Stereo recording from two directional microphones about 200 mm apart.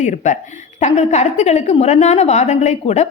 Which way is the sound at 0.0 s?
35° left (ahead or behind).